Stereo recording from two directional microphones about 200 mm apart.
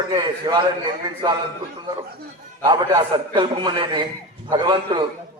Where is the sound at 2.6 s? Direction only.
20° right (ahead or behind).